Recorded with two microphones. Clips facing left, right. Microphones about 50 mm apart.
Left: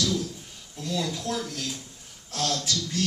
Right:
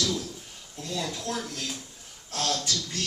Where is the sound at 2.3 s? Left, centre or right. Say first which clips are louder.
Left 1 dB; right.